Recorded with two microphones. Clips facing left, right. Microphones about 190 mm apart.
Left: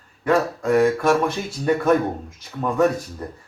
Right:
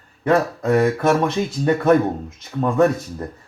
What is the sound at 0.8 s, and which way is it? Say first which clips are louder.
Speech: even; 20° right (ahead or behind).